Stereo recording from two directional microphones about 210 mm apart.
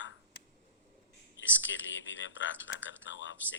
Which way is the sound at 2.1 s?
60° left (ahead or behind).